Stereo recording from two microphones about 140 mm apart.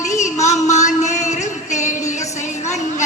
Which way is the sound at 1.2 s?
55° left (ahead or behind).